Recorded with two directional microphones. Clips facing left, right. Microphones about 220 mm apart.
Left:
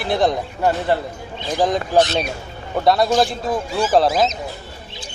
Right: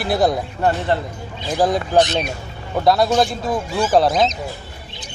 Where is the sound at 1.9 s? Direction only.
15° right (ahead or behind).